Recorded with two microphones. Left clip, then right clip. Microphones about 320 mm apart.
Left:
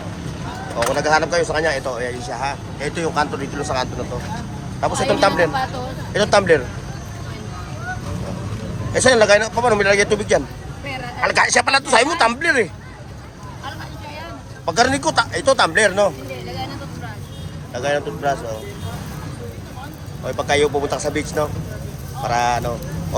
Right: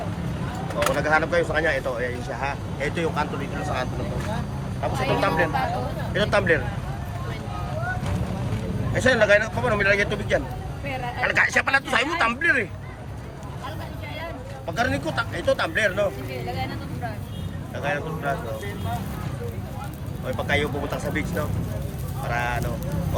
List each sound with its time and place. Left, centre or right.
0.9 s speech: centre
9.0 s speech: centre
14.7 s speech: centre
17.7 s speech: centre
20.2 s speech: centre